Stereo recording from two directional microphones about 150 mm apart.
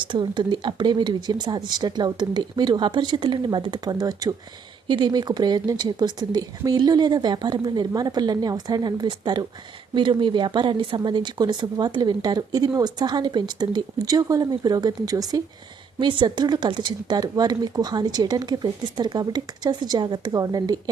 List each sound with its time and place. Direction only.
0.0 s speech: 30° right (ahead or behind)